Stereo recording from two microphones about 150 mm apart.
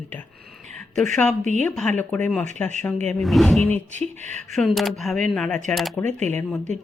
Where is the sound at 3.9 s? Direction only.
50° right (ahead or behind).